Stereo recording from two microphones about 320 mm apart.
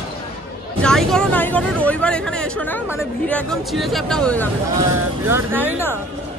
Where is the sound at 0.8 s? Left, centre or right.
Centre.